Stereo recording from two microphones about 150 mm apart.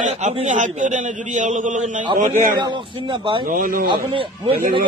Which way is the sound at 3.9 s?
35° right (ahead or behind).